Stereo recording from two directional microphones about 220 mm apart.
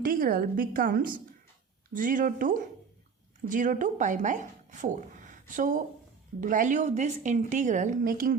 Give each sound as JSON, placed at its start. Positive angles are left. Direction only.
{"t": 0.0, "sound": "a woman's voice", "side_deg": -40}